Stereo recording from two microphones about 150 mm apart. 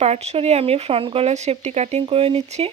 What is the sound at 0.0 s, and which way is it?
Speech, 45° right (ahead or behind).